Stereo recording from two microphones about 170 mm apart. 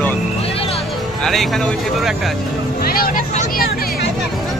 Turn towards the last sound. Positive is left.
turn(degrees=55)  # may be behind; listen again after turning